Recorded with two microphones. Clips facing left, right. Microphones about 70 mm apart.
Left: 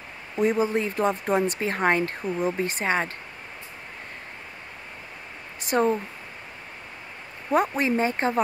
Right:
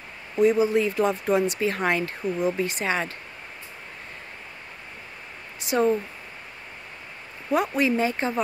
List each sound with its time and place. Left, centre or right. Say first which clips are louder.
0.4 s speech: right 3 dB; left
2.2 s speech: right 5 dB; centre
2.5 s speech: left 1 dB; left
5.7 s speech: even; left
7.5 s speech: even; left